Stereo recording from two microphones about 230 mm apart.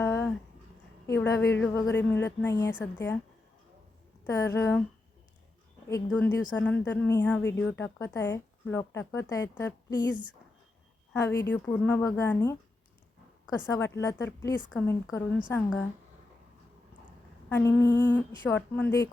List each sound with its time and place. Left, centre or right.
0.0 s a sound: centre
1.0 s a woman's voice: centre
4.3 s a woman's voice: centre
6.1 s a woman's voice: centre
11.1 s a woman's voice: centre
13.7 s a woman's voice: centre
17.7 s a woman's voice: centre